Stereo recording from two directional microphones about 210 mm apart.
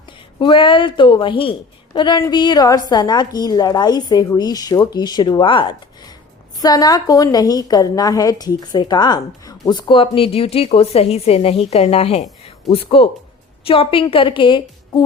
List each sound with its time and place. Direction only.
0.3 s a woman's voice: 25° left (ahead or behind)